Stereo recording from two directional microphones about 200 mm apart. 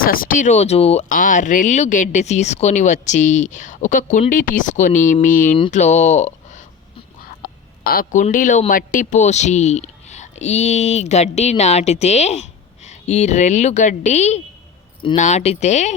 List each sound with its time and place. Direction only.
0.0 s speech: 45° left (ahead or behind)
7.4 s speech: 45° left (ahead or behind)